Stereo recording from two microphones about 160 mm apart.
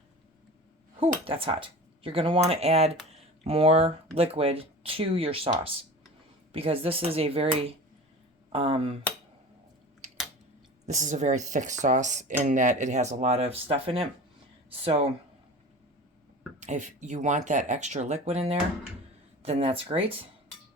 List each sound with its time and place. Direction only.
0.9 s speech: 35° right (ahead or behind)
10.8 s speech: 50° right (ahead or behind)
16.6 s speech: 50° right (ahead or behind)